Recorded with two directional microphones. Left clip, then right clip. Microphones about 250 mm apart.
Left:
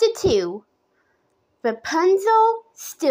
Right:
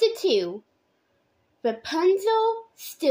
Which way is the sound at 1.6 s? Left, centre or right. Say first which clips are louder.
Left 4 dB; centre.